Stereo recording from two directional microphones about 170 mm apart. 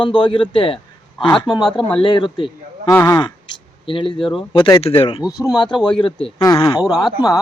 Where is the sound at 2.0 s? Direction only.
25° left (ahead or behind).